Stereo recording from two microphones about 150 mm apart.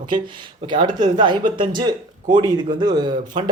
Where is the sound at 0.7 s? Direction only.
30° right (ahead or behind).